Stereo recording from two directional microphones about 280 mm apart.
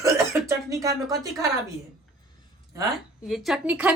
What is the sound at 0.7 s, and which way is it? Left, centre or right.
Speech, centre.